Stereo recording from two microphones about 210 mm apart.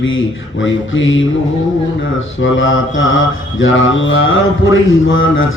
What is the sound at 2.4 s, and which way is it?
A man's voice, 65° left (ahead or behind).